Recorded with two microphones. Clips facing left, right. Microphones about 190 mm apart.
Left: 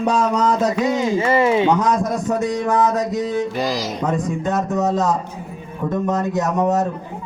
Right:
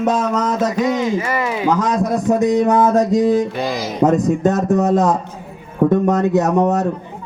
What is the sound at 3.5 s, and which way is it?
Speech, centre (ahead or behind).